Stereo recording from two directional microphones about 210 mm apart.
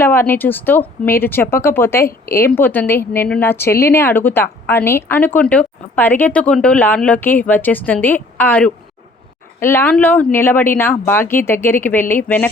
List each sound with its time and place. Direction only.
0.0 s speech: 10° left (ahead or behind)